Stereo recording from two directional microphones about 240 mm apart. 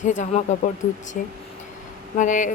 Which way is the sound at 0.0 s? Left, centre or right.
Left.